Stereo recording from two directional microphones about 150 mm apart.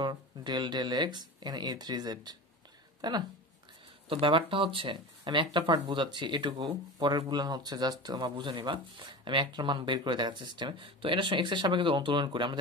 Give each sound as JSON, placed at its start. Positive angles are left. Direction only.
{"t": 0.0, "sound": "speech", "side_deg": -30}